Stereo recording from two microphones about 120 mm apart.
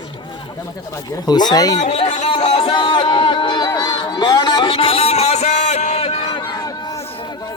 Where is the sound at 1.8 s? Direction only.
60° left (ahead or behind).